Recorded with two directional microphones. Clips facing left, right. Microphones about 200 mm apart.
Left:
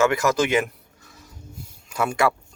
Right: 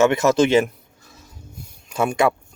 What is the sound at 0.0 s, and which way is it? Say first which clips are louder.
Speech: right 4 dB; 25° right (ahead or behind).